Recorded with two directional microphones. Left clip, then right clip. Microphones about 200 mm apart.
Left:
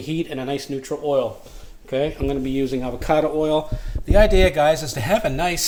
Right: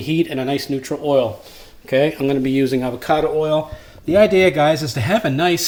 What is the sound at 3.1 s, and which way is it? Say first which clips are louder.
Speech: right 1 dB; 30° left (ahead or behind).